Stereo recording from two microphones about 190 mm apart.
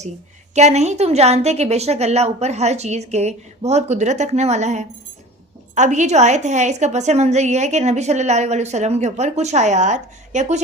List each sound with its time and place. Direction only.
0.5 s a woman's voice: 35° right (ahead or behind)